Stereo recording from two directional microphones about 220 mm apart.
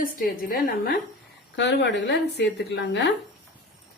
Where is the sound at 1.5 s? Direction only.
55° left (ahead or behind).